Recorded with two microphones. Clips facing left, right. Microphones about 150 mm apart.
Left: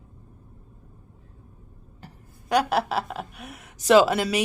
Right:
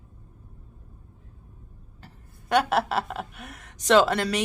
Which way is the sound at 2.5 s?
Centre (ahead or behind).